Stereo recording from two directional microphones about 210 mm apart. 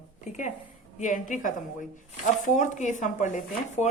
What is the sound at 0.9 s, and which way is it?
Speech, 35° left (ahead or behind).